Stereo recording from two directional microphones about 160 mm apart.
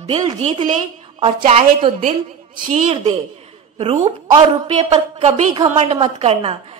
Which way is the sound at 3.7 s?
40° right (ahead or behind).